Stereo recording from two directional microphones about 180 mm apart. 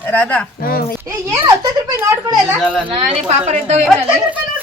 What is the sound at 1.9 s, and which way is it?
Speech, 15° right (ahead or behind).